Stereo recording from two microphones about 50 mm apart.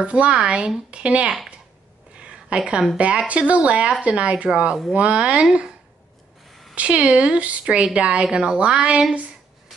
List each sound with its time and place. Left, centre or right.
0.0 s a woman's voice: right
2.1 s a sound: centre
3.3 s a woman's voice: right